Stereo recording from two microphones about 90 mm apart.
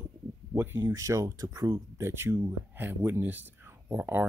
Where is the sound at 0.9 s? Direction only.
35° right (ahead or behind).